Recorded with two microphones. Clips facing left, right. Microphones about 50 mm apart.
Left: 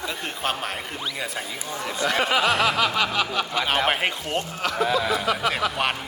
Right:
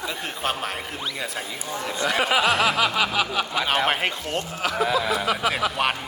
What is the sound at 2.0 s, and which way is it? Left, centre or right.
Speech, centre.